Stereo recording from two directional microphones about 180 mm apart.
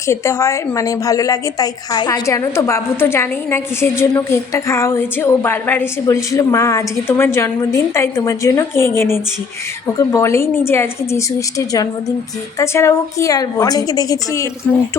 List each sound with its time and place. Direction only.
0.1 s a woman's voice: 15° left (ahead or behind)